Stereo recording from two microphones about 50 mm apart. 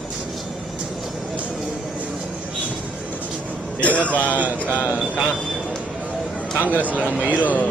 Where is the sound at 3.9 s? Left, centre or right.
Right.